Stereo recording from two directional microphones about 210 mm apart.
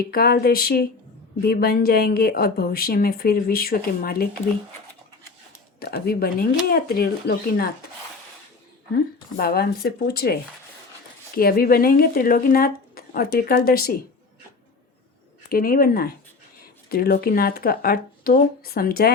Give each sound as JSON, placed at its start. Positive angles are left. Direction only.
{"t": 0.1, "sound": "speech", "side_deg": 45}
{"t": 5.8, "sound": "speech", "side_deg": 45}
{"t": 9.4, "sound": "speech", "side_deg": 45}
{"t": 11.3, "sound": "speech", "side_deg": 45}
{"t": 15.4, "sound": "speech", "side_deg": 45}